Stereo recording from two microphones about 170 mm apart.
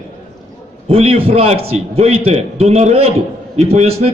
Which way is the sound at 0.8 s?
35° right (ahead or behind).